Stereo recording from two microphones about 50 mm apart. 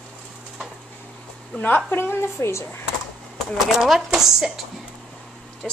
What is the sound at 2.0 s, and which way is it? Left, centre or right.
Speech, left.